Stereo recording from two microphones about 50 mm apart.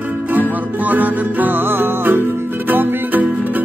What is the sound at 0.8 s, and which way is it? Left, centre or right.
Music, right.